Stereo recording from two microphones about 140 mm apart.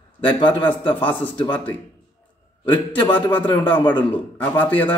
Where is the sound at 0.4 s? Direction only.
35° left (ahead or behind).